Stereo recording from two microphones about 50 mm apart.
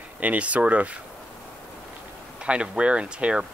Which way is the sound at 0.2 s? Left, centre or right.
Right.